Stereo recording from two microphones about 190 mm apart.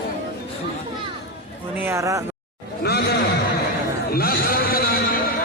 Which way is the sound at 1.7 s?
10° right (ahead or behind).